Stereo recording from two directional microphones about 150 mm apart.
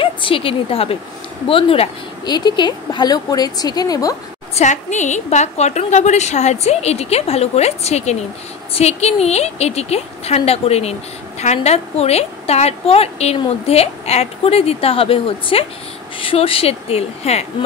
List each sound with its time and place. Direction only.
0.0 s a woman's voice: 35° left (ahead or behind)
4.6 s a woman's voice: 50° left (ahead or behind)